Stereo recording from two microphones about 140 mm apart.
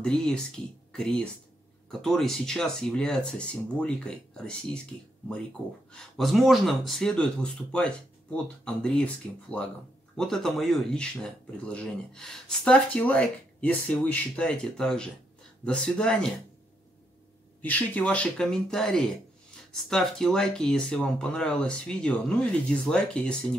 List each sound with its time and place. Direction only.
0.0 s speech: 5° left (ahead or behind)
5.9 s speech: 5° left (ahead or behind)
17.6 s speech: 10° left (ahead or behind)